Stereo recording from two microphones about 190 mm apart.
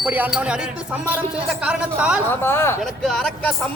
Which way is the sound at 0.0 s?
5° right (ahead or behind).